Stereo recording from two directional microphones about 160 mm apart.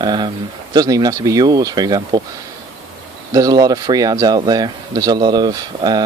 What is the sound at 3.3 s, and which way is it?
Speech, 25° right (ahead or behind).